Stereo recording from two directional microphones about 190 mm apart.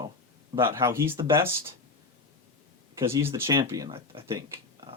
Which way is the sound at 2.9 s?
15° right (ahead or behind).